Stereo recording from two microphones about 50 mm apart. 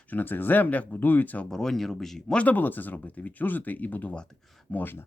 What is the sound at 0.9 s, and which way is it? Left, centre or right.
Speech, left.